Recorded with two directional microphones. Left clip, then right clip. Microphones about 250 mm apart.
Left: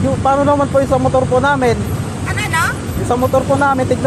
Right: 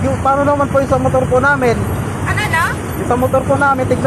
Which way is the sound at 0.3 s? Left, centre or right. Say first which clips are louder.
Even; centre.